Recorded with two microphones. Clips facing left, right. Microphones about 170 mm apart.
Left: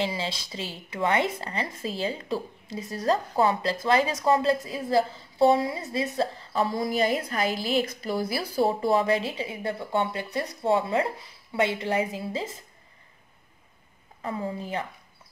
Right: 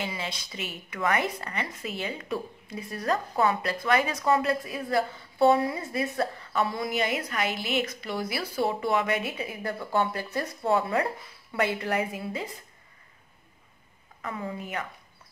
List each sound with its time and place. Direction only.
0.0 s a woman's voice: 30° left (ahead or behind)
14.2 s a woman's voice: 30° left (ahead or behind)